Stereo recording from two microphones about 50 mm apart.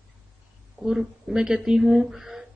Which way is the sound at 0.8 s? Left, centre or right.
Centre.